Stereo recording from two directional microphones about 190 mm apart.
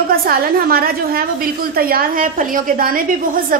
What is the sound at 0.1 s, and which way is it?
A woman's voice, 50° right (ahead or behind).